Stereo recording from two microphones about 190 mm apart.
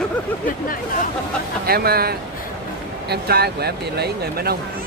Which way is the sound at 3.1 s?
55° right (ahead or behind).